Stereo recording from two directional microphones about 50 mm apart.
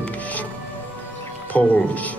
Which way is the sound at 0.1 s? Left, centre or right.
Left.